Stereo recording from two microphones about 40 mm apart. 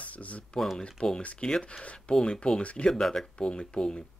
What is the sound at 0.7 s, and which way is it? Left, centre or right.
Speech, left.